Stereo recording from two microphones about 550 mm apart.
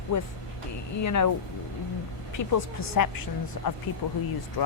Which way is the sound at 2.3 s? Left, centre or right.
Left.